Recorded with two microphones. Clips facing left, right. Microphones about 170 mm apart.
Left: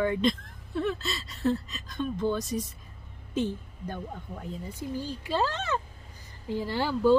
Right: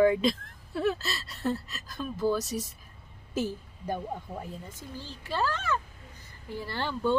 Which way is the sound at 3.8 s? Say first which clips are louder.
Right 4 dB; 10° right (ahead or behind).